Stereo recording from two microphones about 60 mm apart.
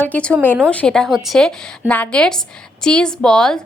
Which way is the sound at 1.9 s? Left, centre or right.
Left.